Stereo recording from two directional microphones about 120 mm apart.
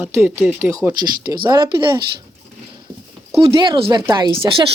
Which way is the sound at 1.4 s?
40° right (ahead or behind).